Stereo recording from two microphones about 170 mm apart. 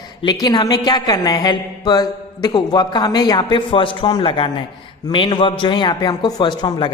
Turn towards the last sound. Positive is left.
turn(degrees=25)  # may be behind; listen again after turning